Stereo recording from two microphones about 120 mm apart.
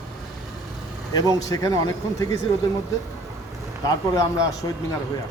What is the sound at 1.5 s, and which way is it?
Speech, 30° left (ahead or behind).